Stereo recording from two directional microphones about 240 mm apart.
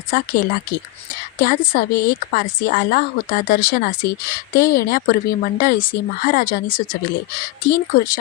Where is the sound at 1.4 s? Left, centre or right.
Left.